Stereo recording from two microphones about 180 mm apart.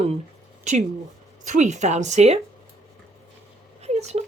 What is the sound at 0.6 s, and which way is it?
Speech, 40° right (ahead or behind).